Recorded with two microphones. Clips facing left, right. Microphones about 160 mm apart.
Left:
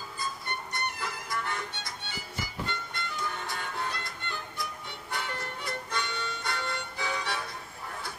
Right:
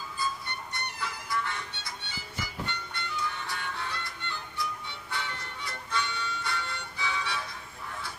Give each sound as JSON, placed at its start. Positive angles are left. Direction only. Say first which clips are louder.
{"t": 1.0, "sound": "music", "louder": "right 1 dB", "side_deg": 45}
{"t": 2.9, "sound": "music", "louder": "even", "side_deg": 40}
{"t": 5.1, "sound": "music", "louder": "left 2 dB", "side_deg": 45}